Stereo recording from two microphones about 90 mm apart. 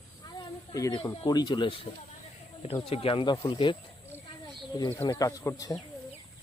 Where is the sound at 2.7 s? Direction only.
90° left; by 3.7 s 70° left (ahead or behind).